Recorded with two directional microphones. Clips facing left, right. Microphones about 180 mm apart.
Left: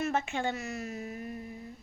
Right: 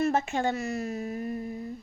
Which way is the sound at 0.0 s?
40° right (ahead or behind).